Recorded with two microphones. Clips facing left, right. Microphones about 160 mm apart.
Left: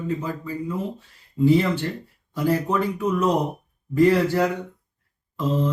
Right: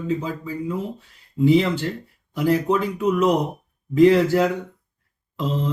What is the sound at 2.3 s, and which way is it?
Speech, 15° right (ahead or behind).